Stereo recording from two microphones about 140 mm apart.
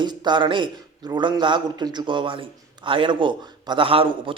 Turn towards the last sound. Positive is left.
turn(degrees=-40)  # may be behind; listen again after turning